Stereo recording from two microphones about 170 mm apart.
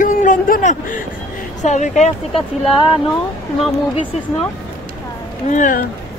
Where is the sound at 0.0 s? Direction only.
50° left (ahead or behind).